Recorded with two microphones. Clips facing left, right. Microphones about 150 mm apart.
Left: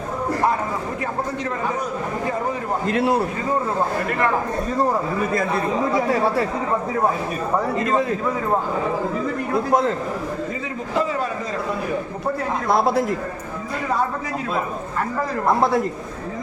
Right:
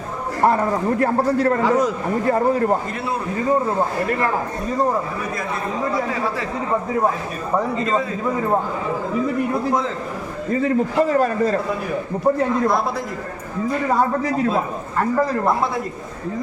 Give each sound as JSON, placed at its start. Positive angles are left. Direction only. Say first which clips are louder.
{"t": 0.4, "sound": "a man's voice", "louder": "right 9 dB", "side_deg": -55}
{"t": 1.6, "sound": "a man's voice", "louder": "right 6 dB", "side_deg": -90}
{"t": 2.3, "sound": "a man's voice", "louder": "right 7 dB", "side_deg": -60}
{"t": 10.6, "sound": "a man's voice", "louder": "right 9 dB", "side_deg": -50}